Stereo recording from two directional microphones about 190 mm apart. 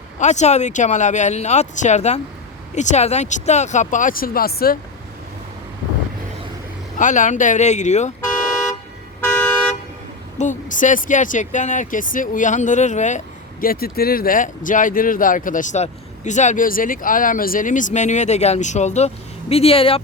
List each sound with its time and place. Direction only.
0.2 s speech: 40° left (ahead or behind)
7.0 s speech: 40° left (ahead or behind)
10.3 s speech: 40° left (ahead or behind)